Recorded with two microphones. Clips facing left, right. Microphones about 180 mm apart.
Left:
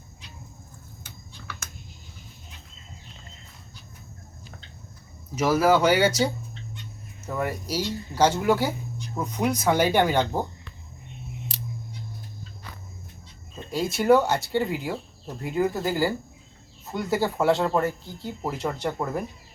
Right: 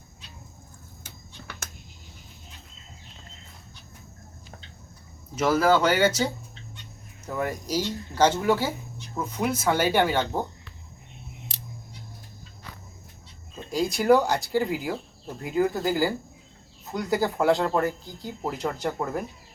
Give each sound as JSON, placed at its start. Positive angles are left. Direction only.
{"t": 1.4, "sound": "a sound", "side_deg": -35}
{"t": 5.3, "sound": "speech", "side_deg": 10}
{"t": 13.7, "sound": "speech", "side_deg": 0}